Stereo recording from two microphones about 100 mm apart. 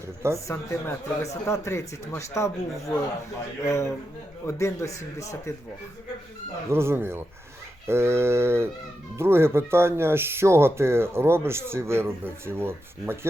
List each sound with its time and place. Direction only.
0.3 s speech: 30° left (ahead or behind)
6.7 s speech: 25° right (ahead or behind)